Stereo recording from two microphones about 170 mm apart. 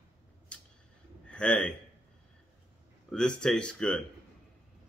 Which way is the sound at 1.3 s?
5° left (ahead or behind).